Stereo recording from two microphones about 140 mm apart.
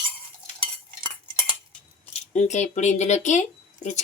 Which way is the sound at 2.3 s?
55° left (ahead or behind).